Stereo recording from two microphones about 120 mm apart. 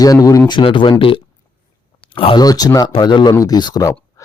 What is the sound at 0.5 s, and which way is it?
Speech, 45° left (ahead or behind).